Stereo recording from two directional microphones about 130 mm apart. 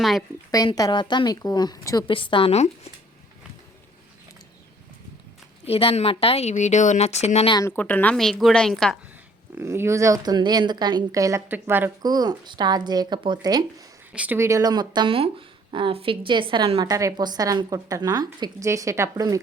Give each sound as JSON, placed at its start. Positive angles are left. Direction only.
{"t": 0.0, "sound": "a woman's voice", "side_deg": 0}
{"t": 0.5, "sound": "speech", "side_deg": 30}
{"t": 2.0, "sound": "speech", "side_deg": 40}
{"t": 2.5, "sound": "a woman's voice", "side_deg": 55}
{"t": 5.6, "sound": "a woman's voice", "side_deg": 50}
{"t": 7.7, "sound": "a woman's voice", "side_deg": 15}
{"t": 9.6, "sound": "speech", "side_deg": -20}
{"t": 11.4, "sound": "a woman's voice", "side_deg": -15}
{"t": 12.0, "sound": "speech", "side_deg": -30}
{"t": 14.1, "sound": "speech", "side_deg": -10}
{"t": 14.3, "sound": "speech", "side_deg": -20}
{"t": 16.8, "sound": "speech", "side_deg": -25}
{"t": 18.7, "sound": "speech", "side_deg": -20}